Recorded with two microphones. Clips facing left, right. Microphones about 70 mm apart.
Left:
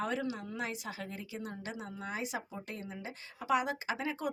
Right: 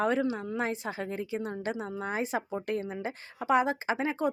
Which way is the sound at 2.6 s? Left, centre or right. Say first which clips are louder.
Right 10 dB; right.